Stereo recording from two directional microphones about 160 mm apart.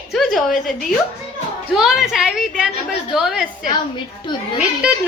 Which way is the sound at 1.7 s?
5° right (ahead or behind).